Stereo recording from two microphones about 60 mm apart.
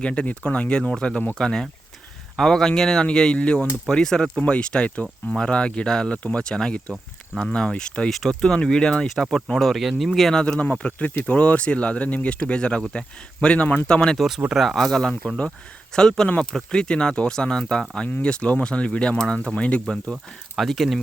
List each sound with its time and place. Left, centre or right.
0.0 s speech: centre
10.3 s speech: centre
14.2 s speech: centre
14.8 s speech: centre
20.6 s speech: centre